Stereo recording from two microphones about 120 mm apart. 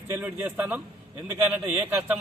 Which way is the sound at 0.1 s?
20° right (ahead or behind).